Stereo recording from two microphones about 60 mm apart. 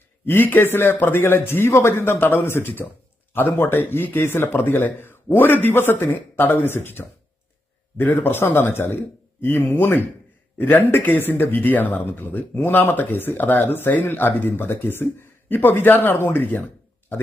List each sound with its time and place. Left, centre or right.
0.3 s speech: left